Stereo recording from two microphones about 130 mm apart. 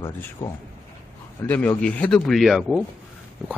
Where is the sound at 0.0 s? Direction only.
20° left (ahead or behind).